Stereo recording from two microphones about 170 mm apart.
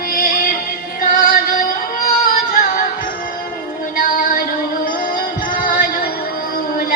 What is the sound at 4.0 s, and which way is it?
Synthetic singing, 55° left (ahead or behind).